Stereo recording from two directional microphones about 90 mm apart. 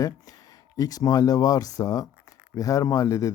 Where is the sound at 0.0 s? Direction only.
45° left (ahead or behind).